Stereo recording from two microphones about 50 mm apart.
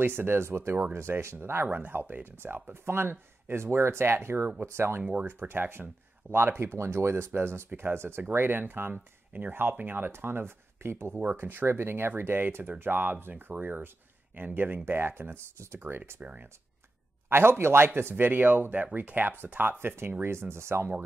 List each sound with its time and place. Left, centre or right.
0.0 s speech: right
0.5 s speech: right
1.7 s speech: right
5.0 s speech: right
5.4 s speech: right
9.5 s speech: right
11.3 s speech: right
15.5 s speech: right
16.2 s speech: right
17.3 s speech: right
18.1 s speech: right
20.2 s speech: right